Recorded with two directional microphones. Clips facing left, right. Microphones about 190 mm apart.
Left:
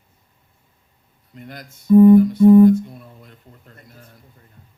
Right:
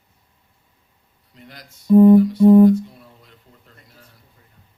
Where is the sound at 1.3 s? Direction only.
50° left (ahead or behind).